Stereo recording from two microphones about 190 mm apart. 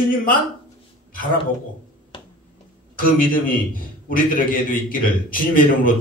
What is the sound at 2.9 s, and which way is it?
A man's voice, 45° left (ahead or behind).